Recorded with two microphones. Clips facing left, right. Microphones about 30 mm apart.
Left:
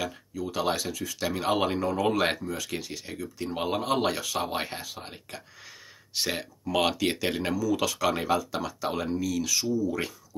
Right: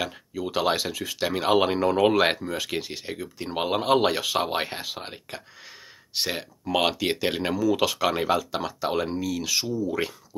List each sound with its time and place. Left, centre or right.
0.0 s speech: right
1.2 s speech: right
1.9 s speech: right
4.6 s speech: right
4.8 s speech: right
6.2 s speech: centre
7.5 s speech: right